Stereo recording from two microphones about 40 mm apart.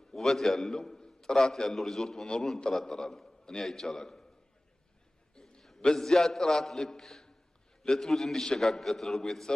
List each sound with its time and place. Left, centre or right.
0.1 s a man's voice: centre
5.3 s a sound: centre
5.9 s a man's voice: centre